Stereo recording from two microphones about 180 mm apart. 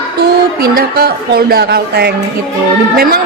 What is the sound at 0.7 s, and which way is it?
A woman's voice, 55° right (ahead or behind).